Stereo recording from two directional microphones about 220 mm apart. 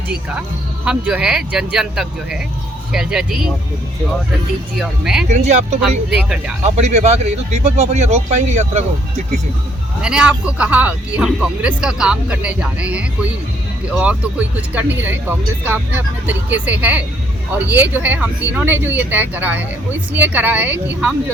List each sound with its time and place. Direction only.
0.9 s speech: 5° right (ahead or behind)
4.8 s speech: 5° right (ahead or behind)
5.3 s speech: 30° right (ahead or behind)
6.1 s speech: 5° right (ahead or behind)
6.7 s speech: 30° right (ahead or behind)
10.0 s speech: 5° right (ahead or behind)